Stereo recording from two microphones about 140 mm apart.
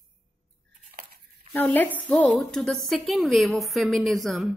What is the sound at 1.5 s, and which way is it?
A woman's voice, 15° left (ahead or behind).